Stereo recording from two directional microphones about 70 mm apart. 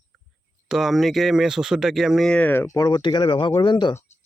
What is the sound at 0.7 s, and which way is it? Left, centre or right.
A man's voice, centre.